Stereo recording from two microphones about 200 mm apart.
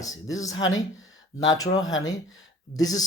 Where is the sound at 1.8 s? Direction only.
75° left (ahead or behind).